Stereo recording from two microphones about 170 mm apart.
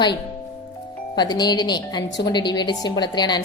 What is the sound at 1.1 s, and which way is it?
A woman's voice, 25° left (ahead or behind).